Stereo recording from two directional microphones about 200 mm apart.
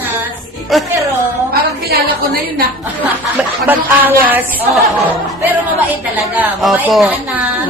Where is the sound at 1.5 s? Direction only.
50° right (ahead or behind).